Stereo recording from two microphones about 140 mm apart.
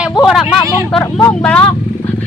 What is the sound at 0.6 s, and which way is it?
Speech, 20° right (ahead or behind).